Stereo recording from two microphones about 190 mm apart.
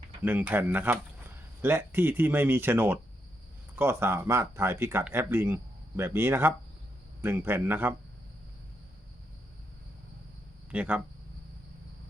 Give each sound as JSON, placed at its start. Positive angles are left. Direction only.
{"t": 0.2, "sound": "speech", "side_deg": -10}
{"t": 10.7, "sound": "speech", "side_deg": -10}